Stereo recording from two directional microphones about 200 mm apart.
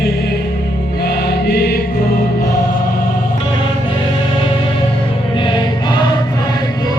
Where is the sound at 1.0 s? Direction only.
50° left (ahead or behind).